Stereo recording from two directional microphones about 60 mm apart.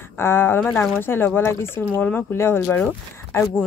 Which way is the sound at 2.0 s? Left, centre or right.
Left.